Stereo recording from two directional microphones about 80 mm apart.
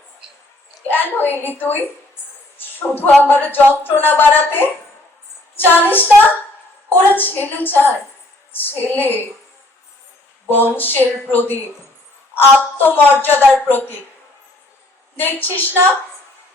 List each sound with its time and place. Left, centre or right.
0.9 s a woman's voice: left
2.6 s a sound: left
3.2 s a woman's voice: left
10.8 s a woman's voice: left
15.1 s a woman's voice: left